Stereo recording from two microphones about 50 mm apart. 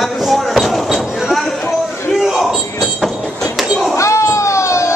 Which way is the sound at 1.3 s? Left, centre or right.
Centre.